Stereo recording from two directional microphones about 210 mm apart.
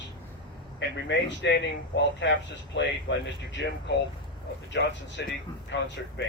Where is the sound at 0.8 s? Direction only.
55° left (ahead or behind).